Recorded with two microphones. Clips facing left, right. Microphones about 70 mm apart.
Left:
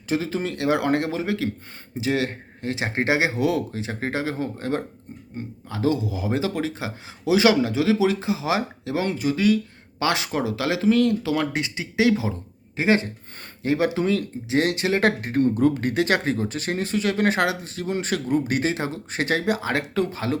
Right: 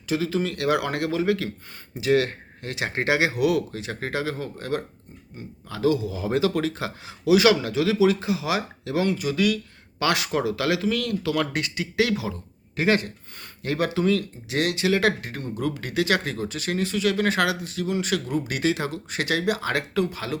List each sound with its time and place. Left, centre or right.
0.1 s speech: left
5.4 s speech: left
5.8 s speech: left
11.2 s speech: centre